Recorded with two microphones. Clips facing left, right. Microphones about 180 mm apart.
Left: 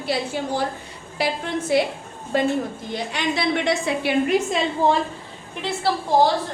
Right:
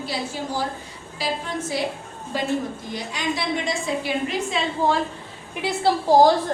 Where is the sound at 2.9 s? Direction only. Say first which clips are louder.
Left 3 dB; 65° left (ahead or behind).